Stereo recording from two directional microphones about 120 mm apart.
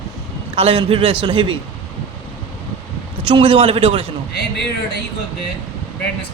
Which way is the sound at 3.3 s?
50° right (ahead or behind).